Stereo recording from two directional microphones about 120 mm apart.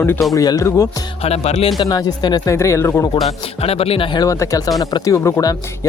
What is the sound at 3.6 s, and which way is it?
Speech, 55° left (ahead or behind).